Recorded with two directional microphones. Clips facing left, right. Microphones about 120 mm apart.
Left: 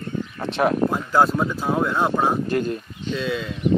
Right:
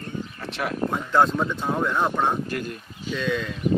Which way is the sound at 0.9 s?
5° left (ahead or behind).